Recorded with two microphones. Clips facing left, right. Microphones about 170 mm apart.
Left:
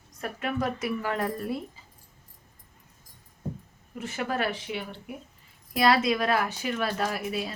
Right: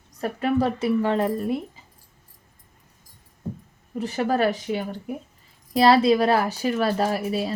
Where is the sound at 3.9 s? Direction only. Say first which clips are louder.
Right 7 dB; 35° right (ahead or behind).